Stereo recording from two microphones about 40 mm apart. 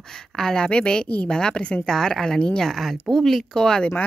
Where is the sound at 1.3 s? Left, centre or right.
Left.